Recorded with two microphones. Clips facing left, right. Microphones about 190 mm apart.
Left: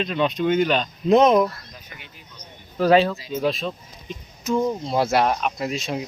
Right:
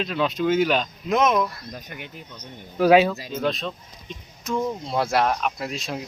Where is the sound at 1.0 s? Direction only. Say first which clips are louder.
Left 7 dB; 30° left (ahead or behind).